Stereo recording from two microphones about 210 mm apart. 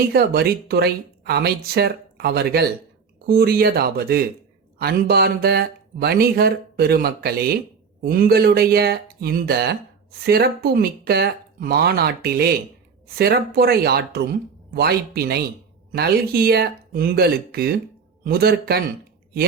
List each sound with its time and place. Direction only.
0.1 s speech: 50° right (ahead or behind)